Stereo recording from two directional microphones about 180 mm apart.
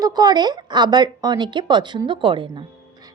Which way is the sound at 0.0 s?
20° right (ahead or behind).